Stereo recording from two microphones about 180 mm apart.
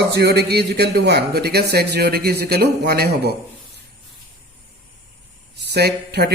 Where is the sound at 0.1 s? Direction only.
65° right (ahead or behind).